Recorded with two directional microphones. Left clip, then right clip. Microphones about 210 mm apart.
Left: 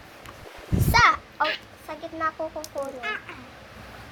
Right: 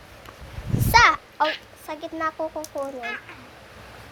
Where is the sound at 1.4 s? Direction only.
45° right (ahead or behind).